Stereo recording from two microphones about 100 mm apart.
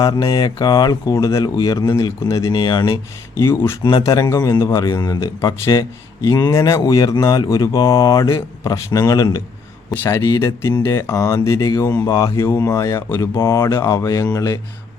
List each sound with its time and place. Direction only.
0.0 s speech: 45° left (ahead or behind)
1.5 s speech: 50° left (ahead or behind)
3.3 s speech: 25° left (ahead or behind)
3.8 s speech: 40° left (ahead or behind)
10.4 s speech: 30° left (ahead or behind)